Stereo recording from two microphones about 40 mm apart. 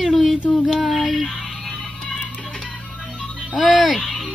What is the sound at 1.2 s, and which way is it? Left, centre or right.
Music, centre.